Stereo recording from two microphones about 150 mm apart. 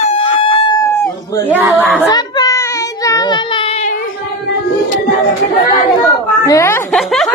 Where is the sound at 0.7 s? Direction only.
15° left (ahead or behind).